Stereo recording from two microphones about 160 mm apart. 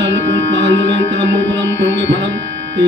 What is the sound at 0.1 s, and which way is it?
Music, 90° right.